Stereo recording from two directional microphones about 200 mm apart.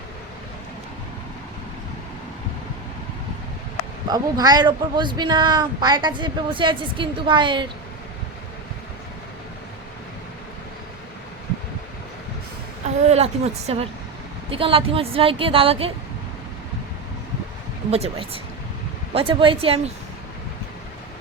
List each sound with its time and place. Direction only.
4.1 s speech: 20° right (ahead or behind)
13.1 s a woman's voice: 30° right (ahead or behind)
17.9 s a woman's voice: 30° right (ahead or behind)